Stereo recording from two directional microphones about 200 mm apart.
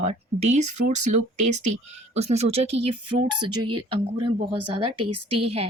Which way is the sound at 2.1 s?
30° right (ahead or behind).